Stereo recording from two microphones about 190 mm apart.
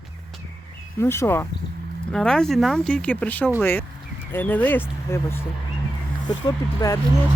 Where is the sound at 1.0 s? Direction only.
15° left (ahead or behind).